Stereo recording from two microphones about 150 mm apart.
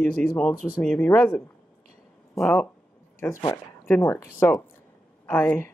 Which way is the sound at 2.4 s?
Centre (ahead or behind).